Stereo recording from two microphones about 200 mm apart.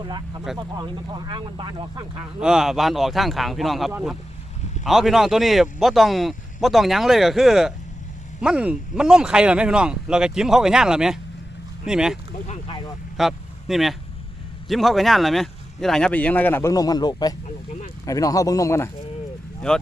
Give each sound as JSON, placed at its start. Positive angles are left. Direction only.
{"t": 0.0, "sound": "speech", "side_deg": -20}
{"t": 2.4, "sound": "speech", "side_deg": -5}
{"t": 12.5, "sound": "a sound", "side_deg": 25}
{"t": 13.1, "sound": "vehicle", "side_deg": 0}
{"t": 14.7, "sound": "speech", "side_deg": 0}